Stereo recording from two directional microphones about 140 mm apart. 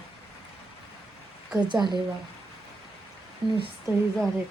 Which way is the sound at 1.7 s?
30° right (ahead or behind).